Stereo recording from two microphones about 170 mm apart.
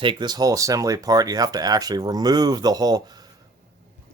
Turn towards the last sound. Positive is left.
turn(degrees=-25)  # may be behind; listen again after turning